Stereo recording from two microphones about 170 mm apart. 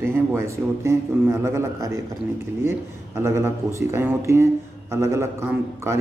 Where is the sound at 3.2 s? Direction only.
15° right (ahead or behind).